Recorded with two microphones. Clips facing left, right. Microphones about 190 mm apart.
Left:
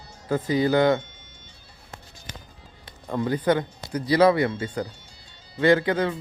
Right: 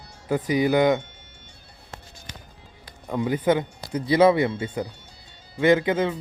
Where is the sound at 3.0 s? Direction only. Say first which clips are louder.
Right 1 dB; 10° right (ahead or behind).